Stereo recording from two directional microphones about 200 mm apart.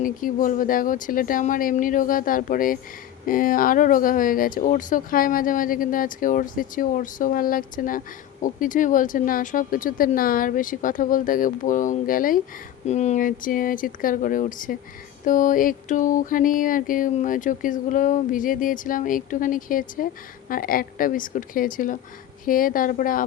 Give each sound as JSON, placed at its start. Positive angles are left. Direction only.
{"t": 0.0, "sound": "speech", "side_deg": 45}
{"t": 15.2, "sound": "a sound", "side_deg": 40}
{"t": 20.5, "sound": "speech", "side_deg": 45}